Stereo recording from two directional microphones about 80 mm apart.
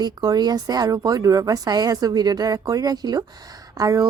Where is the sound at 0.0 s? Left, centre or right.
Right.